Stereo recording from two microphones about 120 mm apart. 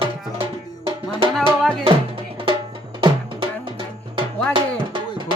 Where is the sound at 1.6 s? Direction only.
5° left (ahead or behind).